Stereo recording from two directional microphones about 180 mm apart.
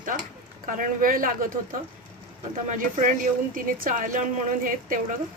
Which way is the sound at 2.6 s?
45° right (ahead or behind).